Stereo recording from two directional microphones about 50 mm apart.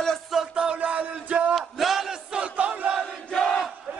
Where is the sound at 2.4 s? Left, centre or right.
Right.